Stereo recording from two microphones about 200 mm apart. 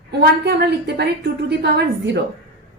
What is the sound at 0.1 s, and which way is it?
A woman's voice, 55° right (ahead or behind).